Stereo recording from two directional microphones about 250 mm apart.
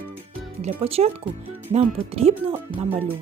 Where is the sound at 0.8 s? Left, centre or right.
Right.